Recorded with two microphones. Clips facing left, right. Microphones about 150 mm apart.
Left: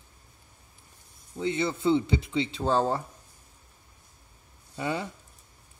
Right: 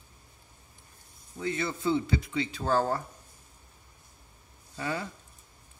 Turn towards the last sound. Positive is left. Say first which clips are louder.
# left 3 dB
turn(degrees=20)  # may be behind; listen again after turning